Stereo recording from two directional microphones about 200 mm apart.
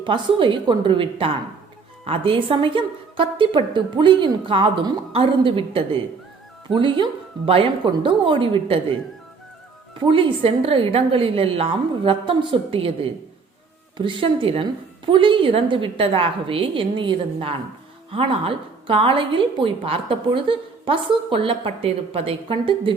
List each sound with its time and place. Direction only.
0.0 s a woman's voice: 25° right (ahead or behind)
10.1 s a woman's voice: 25° right (ahead or behind)
13.9 s a woman's voice: 25° right (ahead or behind)